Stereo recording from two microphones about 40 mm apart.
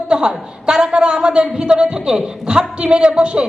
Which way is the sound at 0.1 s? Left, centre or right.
Right.